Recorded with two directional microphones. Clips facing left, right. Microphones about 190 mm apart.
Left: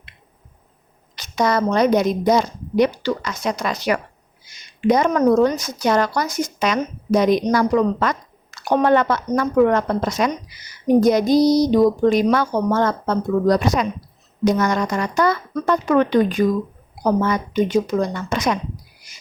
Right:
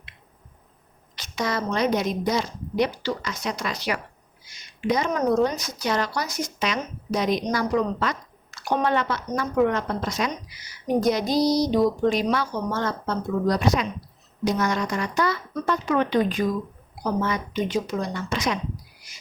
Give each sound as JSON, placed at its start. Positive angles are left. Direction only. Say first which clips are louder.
{"t": 1.1, "sound": "speech", "louder": "left 8 dB", "side_deg": 45}